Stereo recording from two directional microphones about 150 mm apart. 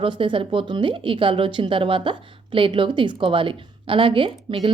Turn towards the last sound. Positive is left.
turn(degrees=-35)  # may be behind; listen again after turning